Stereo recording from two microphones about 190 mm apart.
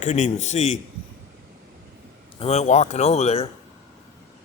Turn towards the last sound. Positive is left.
turn(degrees=35)  # may be behind; listen again after turning